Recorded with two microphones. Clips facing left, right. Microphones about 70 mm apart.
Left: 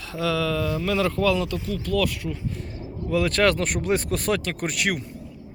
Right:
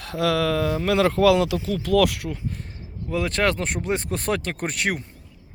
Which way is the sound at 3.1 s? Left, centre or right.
Right.